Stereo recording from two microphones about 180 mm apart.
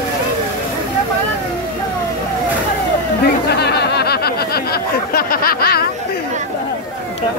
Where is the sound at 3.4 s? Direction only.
65° left (ahead or behind).